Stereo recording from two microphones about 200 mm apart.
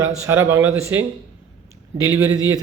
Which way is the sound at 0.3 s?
10° right (ahead or behind).